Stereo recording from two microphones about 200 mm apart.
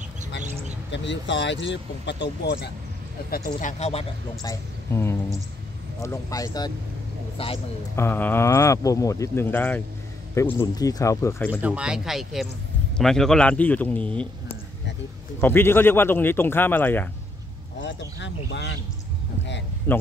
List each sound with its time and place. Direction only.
0.9 s speech: 65° left (ahead or behind); by 3.7 s 45° left (ahead or behind)
4.4 s speech: 15° left (ahead or behind)
7.9 s speech: 10° left (ahead or behind)
11.6 s a man's voice: 5° right (ahead or behind)
15.4 s speech: 10° left (ahead or behind)
17.8 s speech: 65° left (ahead or behind)
19.9 s speech: 10° left (ahead or behind)